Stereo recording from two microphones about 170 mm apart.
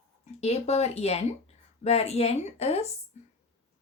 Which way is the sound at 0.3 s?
40° left (ahead or behind).